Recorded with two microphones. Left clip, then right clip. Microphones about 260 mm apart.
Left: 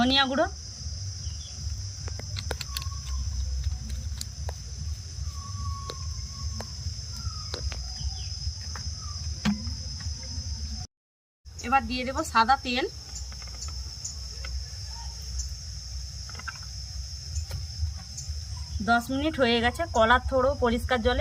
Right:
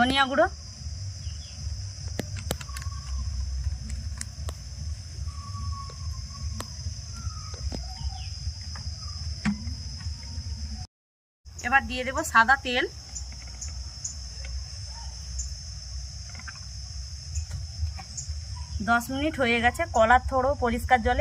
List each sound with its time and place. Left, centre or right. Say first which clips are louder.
0.0 s speech: right 2 dB; centre
11.6 s speech: right 2 dB; centre
18.9 s speech: even; centre